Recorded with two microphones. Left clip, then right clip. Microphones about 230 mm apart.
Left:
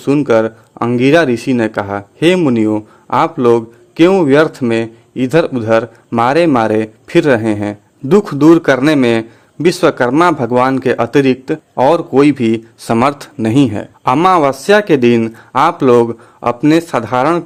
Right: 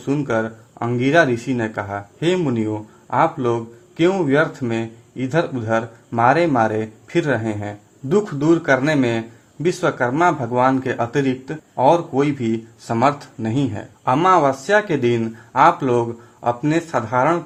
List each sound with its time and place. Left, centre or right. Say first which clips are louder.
0.0 s speech: left 10 dB; left